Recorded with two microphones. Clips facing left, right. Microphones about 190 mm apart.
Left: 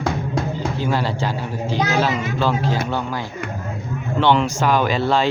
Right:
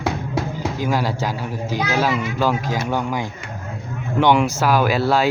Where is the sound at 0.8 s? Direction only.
10° right (ahead or behind).